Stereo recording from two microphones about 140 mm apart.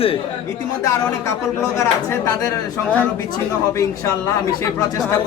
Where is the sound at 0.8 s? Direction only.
25° left (ahead or behind).